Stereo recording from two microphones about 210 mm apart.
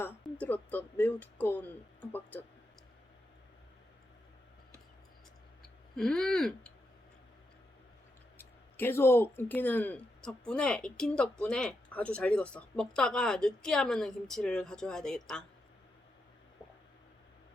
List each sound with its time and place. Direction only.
0.0 s speech: 10° left (ahead or behind)
6.0 s speech: 5° left (ahead or behind)
8.4 s speech: 10° left (ahead or behind)